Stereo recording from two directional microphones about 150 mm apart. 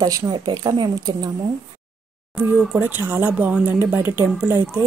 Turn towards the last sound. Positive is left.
turn(degrees=-15)  # may be behind; listen again after turning